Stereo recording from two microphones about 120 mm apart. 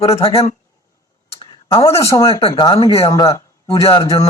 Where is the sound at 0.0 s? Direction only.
55° left (ahead or behind).